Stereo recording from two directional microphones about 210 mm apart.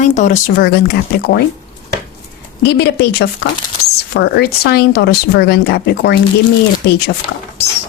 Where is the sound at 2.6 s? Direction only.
50° left (ahead or behind).